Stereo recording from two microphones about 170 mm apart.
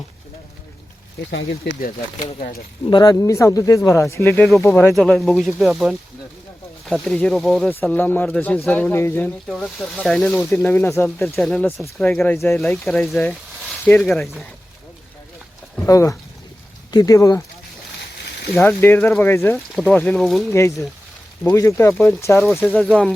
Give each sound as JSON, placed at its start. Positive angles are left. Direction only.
{"t": 1.3, "sound": "speech", "side_deg": 90}
{"t": 2.8, "sound": "speech", "side_deg": 25}
{"t": 4.9, "sound": "speech", "side_deg": 0}
{"t": 7.7, "sound": "speech", "side_deg": 10}
{"t": 9.5, "sound": "speech", "side_deg": 0}
{"t": 12.5, "sound": "speech", "side_deg": 0}
{"t": 15.9, "sound": "speech", "side_deg": 20}
{"t": 18.7, "sound": "speech", "side_deg": 15}
{"t": 20.5, "sound": "speech", "side_deg": 15}